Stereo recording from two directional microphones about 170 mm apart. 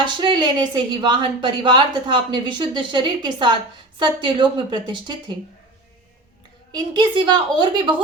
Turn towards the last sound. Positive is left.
turn(degrees=-25)  # may be behind; listen again after turning